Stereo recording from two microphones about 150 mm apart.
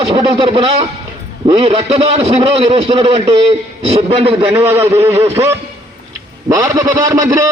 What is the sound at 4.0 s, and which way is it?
Speech, 40° right (ahead or behind).